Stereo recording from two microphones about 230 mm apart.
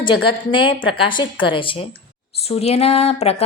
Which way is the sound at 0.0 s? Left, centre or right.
Left.